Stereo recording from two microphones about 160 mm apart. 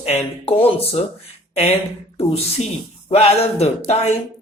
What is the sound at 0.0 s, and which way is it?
Speech, 40° left (ahead or behind).